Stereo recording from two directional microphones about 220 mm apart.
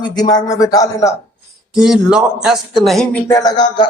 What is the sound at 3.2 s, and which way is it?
Speech, 15° left (ahead or behind).